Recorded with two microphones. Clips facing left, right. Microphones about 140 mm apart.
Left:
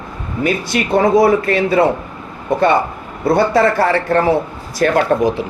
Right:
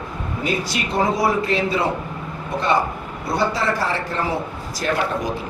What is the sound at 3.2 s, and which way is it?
A man's voice, 55° left (ahead or behind).